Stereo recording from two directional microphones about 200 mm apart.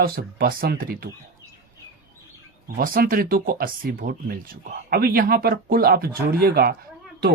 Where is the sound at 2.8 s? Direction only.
45° right (ahead or behind).